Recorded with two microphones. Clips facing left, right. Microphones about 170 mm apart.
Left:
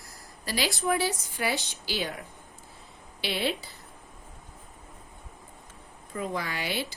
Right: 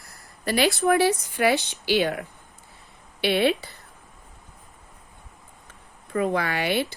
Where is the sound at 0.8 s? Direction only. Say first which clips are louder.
Right 7 dB; 65° right (ahead or behind).